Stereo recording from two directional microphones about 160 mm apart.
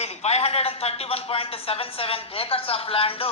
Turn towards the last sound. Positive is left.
turn(degrees=35)  # may be behind; listen again after turning